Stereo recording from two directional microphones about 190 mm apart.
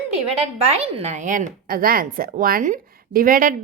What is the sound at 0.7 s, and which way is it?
Speech, 30° right (ahead or behind).